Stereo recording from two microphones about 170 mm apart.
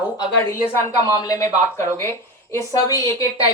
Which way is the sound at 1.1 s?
20° left (ahead or behind).